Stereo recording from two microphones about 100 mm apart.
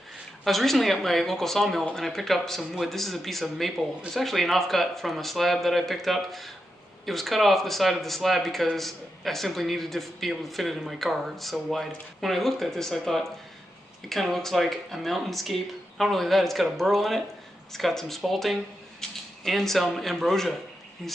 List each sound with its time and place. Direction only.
0.4 s speech: centre (ahead or behind)